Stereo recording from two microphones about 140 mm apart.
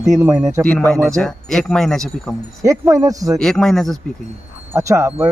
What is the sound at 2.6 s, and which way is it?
Speech, 20° right (ahead or behind).